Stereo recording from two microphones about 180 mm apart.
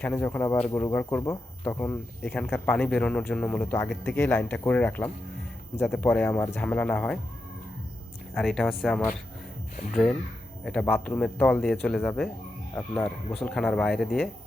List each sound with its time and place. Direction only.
0.0 s speech: 10° left (ahead or behind)
8.4 s speech: centre (ahead or behind)